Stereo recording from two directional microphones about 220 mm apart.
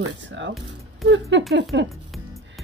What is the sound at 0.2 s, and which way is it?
Speech, 55° right (ahead or behind).